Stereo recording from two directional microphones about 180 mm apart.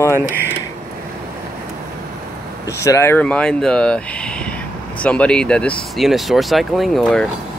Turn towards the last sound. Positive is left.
turn(degrees=0)  # may be behind; listen again after turning